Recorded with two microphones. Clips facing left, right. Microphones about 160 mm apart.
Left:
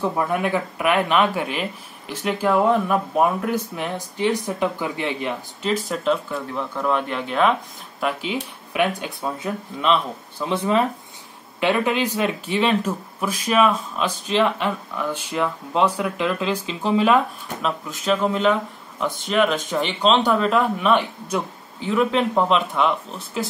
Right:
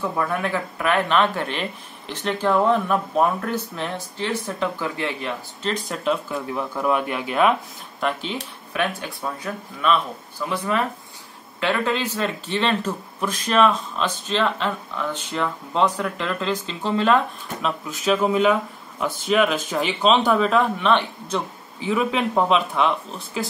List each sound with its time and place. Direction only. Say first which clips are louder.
0.0 s speech: left 2 dB; 20° left (ahead or behind)
5.9 s speech: left 2 dB; 5° right (ahead or behind)
8.0 s speech: left 1 dB; 10° left (ahead or behind)